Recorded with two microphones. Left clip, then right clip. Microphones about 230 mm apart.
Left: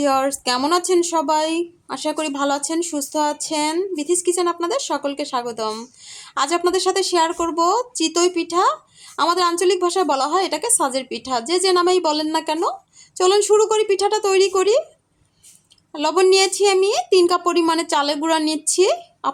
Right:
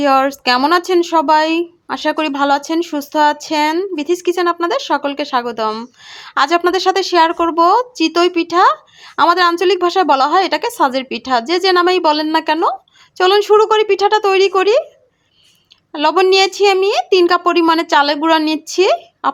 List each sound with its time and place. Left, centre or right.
0.0 s a woman's voice: centre
15.9 s a woman's voice: centre